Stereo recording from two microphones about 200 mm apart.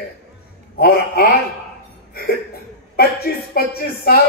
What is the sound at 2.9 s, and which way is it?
A man's voice, 50° left (ahead or behind).